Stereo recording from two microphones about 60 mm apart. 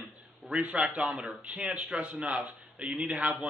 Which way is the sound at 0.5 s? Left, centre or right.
Right.